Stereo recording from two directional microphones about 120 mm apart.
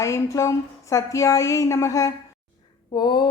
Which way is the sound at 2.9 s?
35° left (ahead or behind).